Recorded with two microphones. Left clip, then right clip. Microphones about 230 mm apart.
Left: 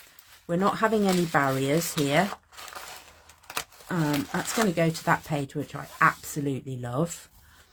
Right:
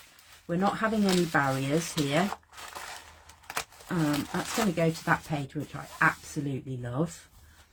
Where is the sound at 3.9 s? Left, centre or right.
Left.